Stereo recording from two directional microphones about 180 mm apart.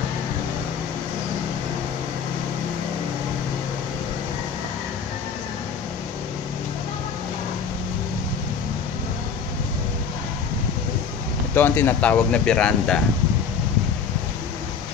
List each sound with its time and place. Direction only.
11.5 s speech: 10° left (ahead or behind)